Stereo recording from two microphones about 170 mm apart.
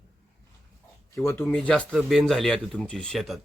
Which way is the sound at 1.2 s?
15° left (ahead or behind).